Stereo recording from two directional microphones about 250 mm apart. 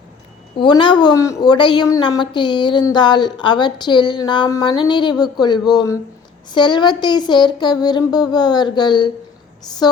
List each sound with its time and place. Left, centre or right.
0.5 s a woman's voice: centre